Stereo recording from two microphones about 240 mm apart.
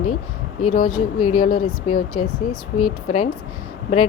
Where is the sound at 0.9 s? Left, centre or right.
Left.